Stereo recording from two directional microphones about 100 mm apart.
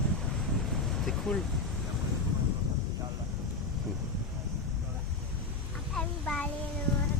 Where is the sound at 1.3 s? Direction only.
5° left (ahead or behind).